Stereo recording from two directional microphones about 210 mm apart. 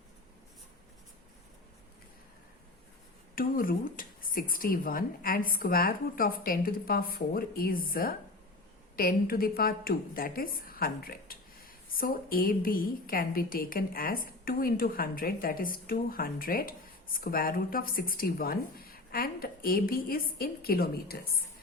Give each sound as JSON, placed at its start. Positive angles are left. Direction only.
{"t": 3.3, "sound": "a woman's voice", "side_deg": 40}